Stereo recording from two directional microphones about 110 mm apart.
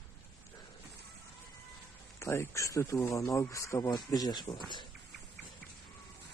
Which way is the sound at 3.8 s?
35° left (ahead or behind).